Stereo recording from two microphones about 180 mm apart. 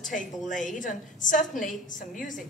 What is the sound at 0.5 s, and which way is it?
A woman's voice, 45° left (ahead or behind).